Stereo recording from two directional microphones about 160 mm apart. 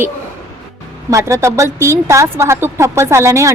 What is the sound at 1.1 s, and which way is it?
A woman's voice, 20° right (ahead or behind).